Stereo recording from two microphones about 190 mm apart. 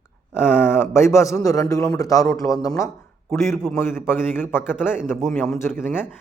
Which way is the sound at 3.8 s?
10° left (ahead or behind).